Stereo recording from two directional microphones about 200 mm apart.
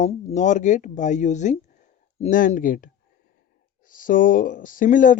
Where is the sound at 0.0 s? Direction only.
35° left (ahead or behind).